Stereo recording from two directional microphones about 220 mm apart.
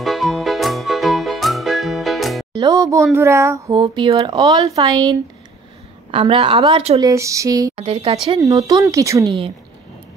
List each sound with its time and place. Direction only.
0.0 s music: centre (ahead or behind)
2.5 s speech: 15° right (ahead or behind)
6.1 s speech: 25° right (ahead or behind)
7.1 s a woman's voice: 15° right (ahead or behind)
7.7 s speech: 25° right (ahead or behind)
8.4 s a woman's voice: 15° right (ahead or behind)